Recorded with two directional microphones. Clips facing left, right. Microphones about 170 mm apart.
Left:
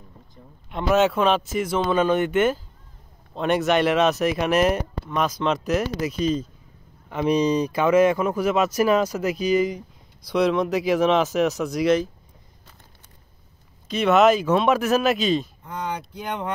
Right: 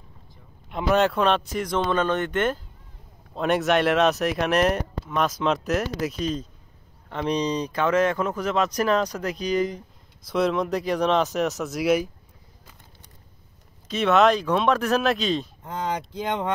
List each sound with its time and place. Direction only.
0.7 s speech: centre (ahead or behind)
13.8 s speech: centre (ahead or behind)